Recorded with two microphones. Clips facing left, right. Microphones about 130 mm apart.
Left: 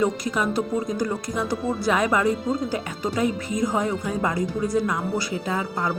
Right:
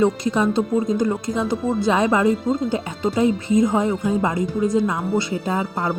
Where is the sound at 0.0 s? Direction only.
25° right (ahead or behind).